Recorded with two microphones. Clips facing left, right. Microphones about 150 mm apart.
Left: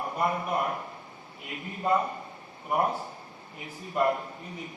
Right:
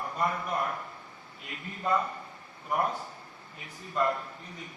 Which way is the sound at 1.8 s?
20° left (ahead or behind).